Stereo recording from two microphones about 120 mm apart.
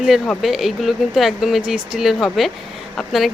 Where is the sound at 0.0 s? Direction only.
Centre (ahead or behind).